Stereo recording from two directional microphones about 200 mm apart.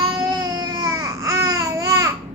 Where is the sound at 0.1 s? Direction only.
10° right (ahead or behind).